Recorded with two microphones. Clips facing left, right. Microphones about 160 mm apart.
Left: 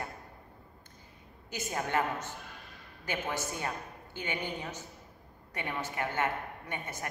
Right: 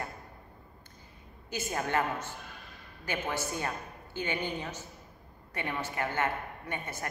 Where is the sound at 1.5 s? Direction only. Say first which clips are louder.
Right 1 dB; 20° left (ahead or behind).